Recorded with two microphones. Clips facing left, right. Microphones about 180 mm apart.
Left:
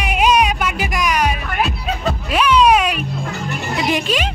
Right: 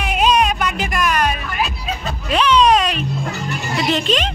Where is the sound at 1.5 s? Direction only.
60° left (ahead or behind).